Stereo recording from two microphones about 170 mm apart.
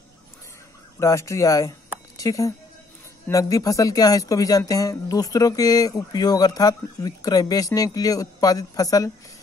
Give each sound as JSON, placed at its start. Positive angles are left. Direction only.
{"t": 0.9, "sound": "speech", "side_deg": 15}